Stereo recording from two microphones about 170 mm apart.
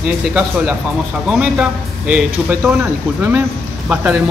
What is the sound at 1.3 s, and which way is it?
Speech, 5° right (ahead or behind).